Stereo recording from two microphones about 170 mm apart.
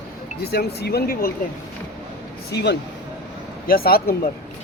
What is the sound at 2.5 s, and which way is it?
Speech, 80° left.